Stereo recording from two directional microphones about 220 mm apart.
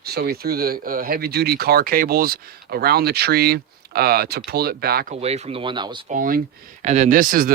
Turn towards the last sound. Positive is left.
turn(degrees=-40)  # may be behind; listen again after turning